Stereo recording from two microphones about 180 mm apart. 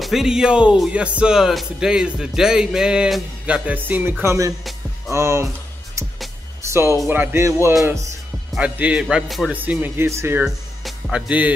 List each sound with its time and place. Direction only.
0.0 s speech: centre (ahead or behind)
6.6 s speech: 15° right (ahead or behind)
8.5 s speech: 5° right (ahead or behind)
10.8 s music: 5° right (ahead or behind)